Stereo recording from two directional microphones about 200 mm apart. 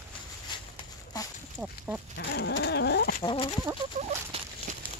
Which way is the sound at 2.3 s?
55° left (ahead or behind).